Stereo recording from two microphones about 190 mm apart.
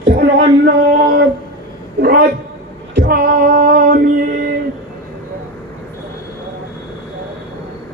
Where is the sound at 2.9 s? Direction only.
55° right (ahead or behind).